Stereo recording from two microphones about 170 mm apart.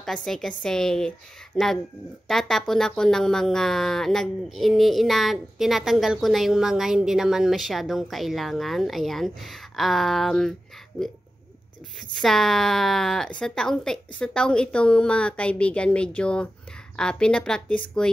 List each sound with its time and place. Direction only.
0.0 s speech: 5° left (ahead or behind)
12.2 s speech: centre (ahead or behind)